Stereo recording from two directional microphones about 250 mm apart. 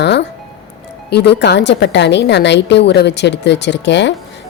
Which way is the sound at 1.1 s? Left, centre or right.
Left.